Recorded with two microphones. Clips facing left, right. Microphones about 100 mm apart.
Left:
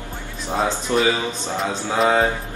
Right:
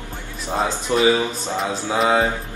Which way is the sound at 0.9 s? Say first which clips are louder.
Right 1 dB; 15° right (ahead or behind).